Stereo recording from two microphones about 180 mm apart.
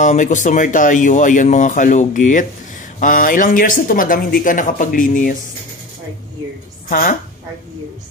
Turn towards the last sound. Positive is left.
turn(degrees=50)  # may be behind; listen again after turning